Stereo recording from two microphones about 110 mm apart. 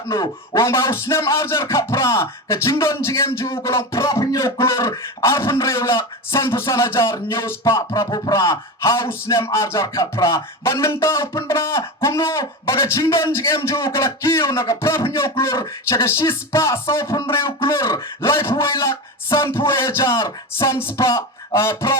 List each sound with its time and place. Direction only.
0.1 s speech: 25° left (ahead or behind)